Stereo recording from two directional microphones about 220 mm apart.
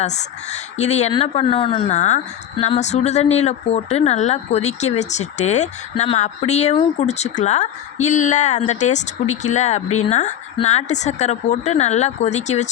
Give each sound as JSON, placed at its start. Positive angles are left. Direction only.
{"t": 0.5, "sound": "speech", "side_deg": 30}